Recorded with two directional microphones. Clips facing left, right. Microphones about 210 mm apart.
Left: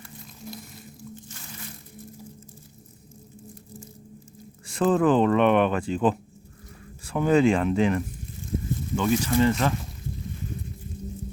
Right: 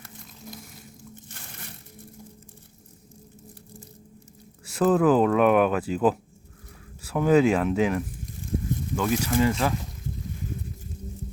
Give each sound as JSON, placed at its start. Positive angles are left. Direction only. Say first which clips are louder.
{"t": 4.6, "sound": "speech", "louder": "right 1 dB", "side_deg": -5}